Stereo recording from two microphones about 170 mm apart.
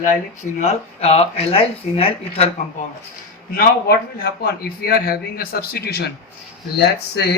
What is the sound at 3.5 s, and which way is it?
A man's voice, 65° left (ahead or behind).